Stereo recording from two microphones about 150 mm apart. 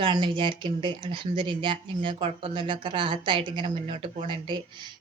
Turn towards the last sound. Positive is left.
turn(degrees=-30)  # may be behind; listen again after turning